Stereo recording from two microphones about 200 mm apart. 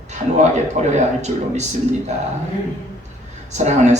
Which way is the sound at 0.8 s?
35° right (ahead or behind).